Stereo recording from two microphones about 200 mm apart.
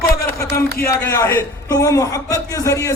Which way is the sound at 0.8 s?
15° left (ahead or behind).